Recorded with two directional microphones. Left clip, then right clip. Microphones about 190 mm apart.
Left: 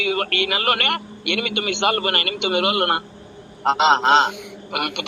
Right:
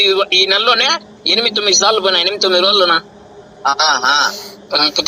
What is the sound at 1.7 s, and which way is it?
A man's voice, 20° right (ahead or behind).